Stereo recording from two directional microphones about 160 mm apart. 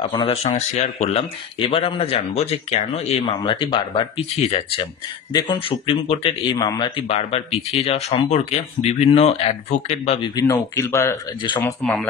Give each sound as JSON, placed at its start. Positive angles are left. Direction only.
{"t": 0.1, "sound": "speech", "side_deg": 30}
{"t": 0.4, "sound": "speech", "side_deg": 40}
{"t": 10.3, "sound": "speech", "side_deg": 20}